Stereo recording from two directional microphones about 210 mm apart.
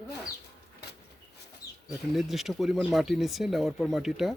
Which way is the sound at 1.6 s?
15° left (ahead or behind).